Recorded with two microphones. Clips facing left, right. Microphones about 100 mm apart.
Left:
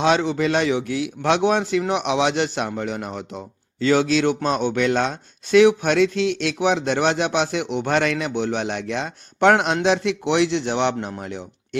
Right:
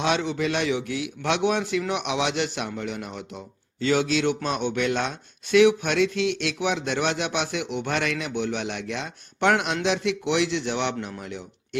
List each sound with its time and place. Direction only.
0.0 s speech: 35° left (ahead or behind)